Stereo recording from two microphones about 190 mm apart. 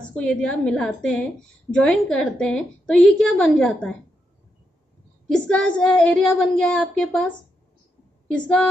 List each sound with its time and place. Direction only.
0.1 s a woman's voice: 5° left (ahead or behind)
5.3 s a woman's voice: 5° left (ahead or behind)